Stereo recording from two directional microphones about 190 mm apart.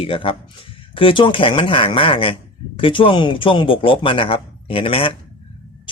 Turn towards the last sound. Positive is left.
turn(degrees=30)  # may be behind; listen again after turning